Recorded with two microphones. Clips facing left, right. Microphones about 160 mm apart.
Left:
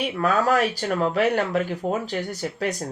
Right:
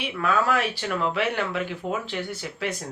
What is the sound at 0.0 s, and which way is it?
Speech, 40° left (ahead or behind).